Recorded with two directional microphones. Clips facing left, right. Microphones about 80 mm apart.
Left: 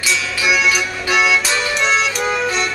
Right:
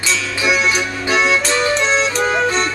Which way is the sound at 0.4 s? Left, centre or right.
Right.